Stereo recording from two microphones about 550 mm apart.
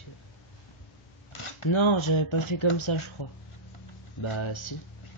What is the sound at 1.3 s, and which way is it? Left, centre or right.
Speech, left.